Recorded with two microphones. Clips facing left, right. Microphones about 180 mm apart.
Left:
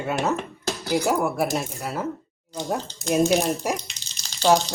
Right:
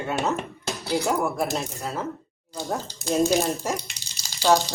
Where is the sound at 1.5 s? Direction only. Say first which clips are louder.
Left 2 dB; 15° left (ahead or behind).